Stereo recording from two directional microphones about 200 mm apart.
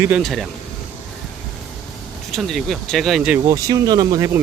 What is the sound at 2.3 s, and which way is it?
Speech, centre (ahead or behind).